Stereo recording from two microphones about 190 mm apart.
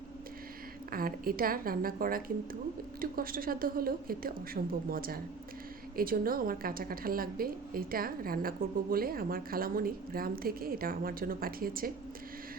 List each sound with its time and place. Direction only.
0.9 s a woman's voice: 50° right (ahead or behind)